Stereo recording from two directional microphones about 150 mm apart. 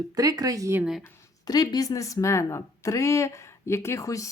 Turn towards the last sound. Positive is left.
turn(degrees=20)  # may be behind; listen again after turning